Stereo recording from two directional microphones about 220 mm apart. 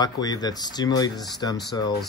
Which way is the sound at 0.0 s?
20° left (ahead or behind).